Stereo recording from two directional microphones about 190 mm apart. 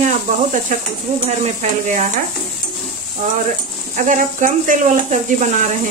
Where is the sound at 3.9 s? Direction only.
45° right (ahead or behind).